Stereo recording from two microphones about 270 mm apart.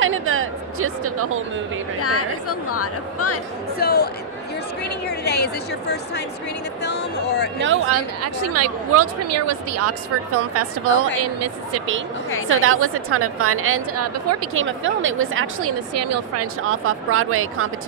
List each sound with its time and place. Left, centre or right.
0.0 s a woman's voice: right
2.0 s speech: left
3.7 s a woman's voice: left
7.6 s a woman's voice: right
8.2 s speech: right
12.4 s a woman's voice: right
15.9 s a woman's voice: right